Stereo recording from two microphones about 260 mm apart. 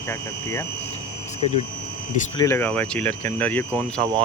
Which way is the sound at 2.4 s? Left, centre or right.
Centre.